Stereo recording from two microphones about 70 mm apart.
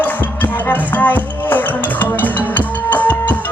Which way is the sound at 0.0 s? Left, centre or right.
Left.